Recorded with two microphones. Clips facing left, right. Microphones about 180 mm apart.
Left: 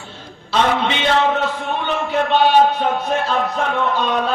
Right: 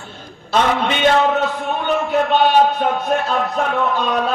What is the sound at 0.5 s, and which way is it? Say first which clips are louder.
Speech: right 1 dB; 50° right (ahead or behind).